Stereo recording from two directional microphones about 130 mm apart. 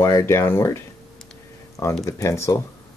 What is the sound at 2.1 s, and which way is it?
Speech, 25° left (ahead or behind).